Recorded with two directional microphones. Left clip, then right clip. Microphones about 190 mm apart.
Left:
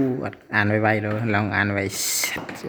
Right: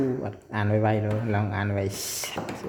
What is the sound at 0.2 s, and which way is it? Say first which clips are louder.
Speech: left 8 dB; 15° left (ahead or behind).